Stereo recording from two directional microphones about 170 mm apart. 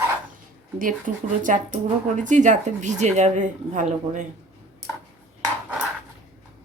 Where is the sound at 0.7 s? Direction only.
50° right (ahead or behind).